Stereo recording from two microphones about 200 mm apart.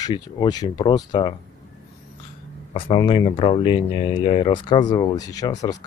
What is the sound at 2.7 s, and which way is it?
Speech, 25° left (ahead or behind).